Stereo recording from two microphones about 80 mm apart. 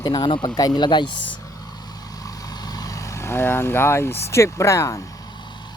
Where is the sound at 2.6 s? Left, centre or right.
Left.